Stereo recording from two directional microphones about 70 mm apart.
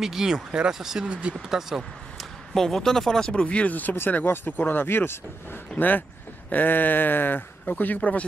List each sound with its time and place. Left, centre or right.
0.0 s speech: centre
1.3 s speech: centre
2.5 s speech: centre; by 8.3 s left